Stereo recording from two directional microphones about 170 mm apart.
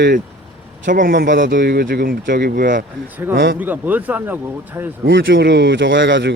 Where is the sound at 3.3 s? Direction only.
90° right.